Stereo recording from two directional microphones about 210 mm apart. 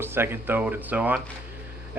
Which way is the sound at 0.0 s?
10° right (ahead or behind).